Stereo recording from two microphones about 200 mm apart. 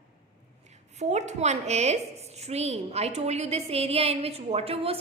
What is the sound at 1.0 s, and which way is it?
A woman's voice, 35° right (ahead or behind).